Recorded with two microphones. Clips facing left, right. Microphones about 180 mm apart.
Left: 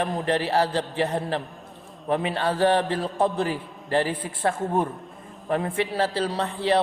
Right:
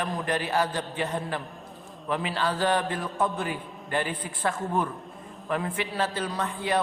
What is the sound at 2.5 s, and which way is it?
Mantra, 30° left (ahead or behind).